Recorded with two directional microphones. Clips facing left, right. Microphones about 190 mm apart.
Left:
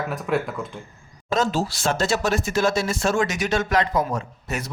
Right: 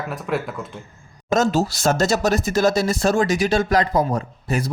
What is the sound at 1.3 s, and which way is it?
Speech, 45° right (ahead or behind).